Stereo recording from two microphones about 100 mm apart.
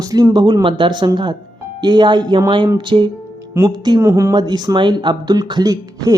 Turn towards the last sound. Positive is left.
turn(degrees=-40)  # may be behind; listen again after turning